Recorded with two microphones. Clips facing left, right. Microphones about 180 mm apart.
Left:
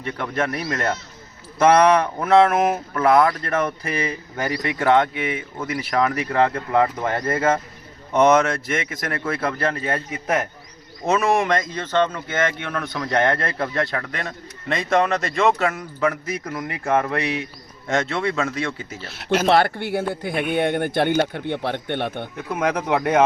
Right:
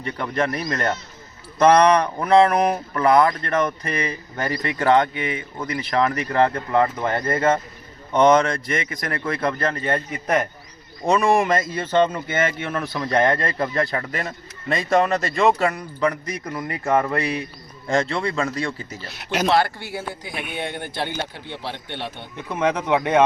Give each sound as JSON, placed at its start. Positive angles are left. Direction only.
{"t": 0.0, "sound": "speech", "side_deg": 0}
{"t": 19.5, "sound": "speech", "side_deg": 55}
{"t": 22.5, "sound": "speech", "side_deg": 10}